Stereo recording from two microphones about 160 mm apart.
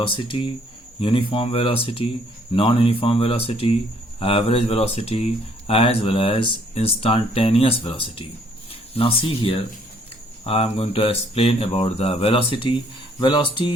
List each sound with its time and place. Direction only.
0.2 s speech: 30° left (ahead or behind)